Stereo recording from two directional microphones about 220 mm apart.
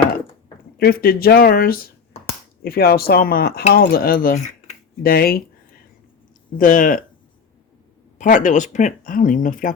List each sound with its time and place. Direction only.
0.8 s speech: 45° left (ahead or behind)
6.6 s speech: 40° left (ahead or behind)
8.2 s speech: 35° left (ahead or behind)